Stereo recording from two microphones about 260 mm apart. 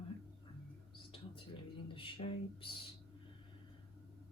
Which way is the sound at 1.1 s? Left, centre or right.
Centre.